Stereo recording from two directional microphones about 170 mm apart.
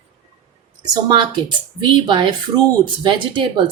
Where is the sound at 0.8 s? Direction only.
25° right (ahead or behind).